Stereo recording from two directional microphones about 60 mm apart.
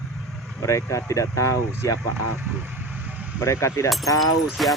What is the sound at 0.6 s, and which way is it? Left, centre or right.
Speech, left.